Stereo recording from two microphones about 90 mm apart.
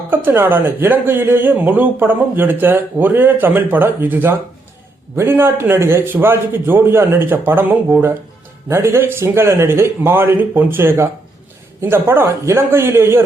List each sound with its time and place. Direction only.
0.1 s speech: 25° right (ahead or behind)